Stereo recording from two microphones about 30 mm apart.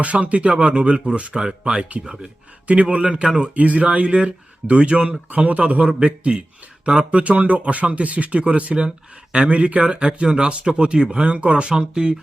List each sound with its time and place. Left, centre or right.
0.0 s speech: right
1.1 s speech: right
2.8 s speech: right
3.2 s speech: right
3.5 s speech: right
4.0 s speech: right
11.2 s speech: right
11.8 s speech: right